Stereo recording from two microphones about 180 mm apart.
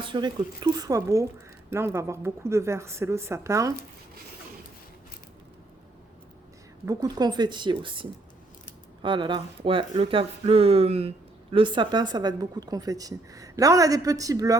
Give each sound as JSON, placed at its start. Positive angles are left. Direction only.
{"t": 0.0, "sound": "speech", "side_deg": -25}
{"t": 6.8, "sound": "speech", "side_deg": -20}